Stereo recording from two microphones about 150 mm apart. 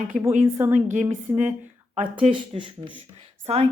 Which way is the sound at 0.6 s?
10° right (ahead or behind).